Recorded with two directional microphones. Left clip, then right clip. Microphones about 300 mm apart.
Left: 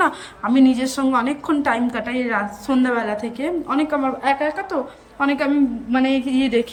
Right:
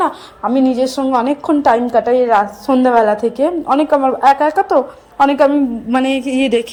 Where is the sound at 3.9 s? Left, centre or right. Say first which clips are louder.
Right 12 dB; right.